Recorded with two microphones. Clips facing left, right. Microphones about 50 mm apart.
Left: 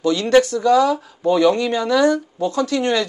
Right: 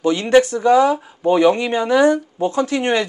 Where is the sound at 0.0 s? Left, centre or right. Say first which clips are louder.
Right 1 dB; right.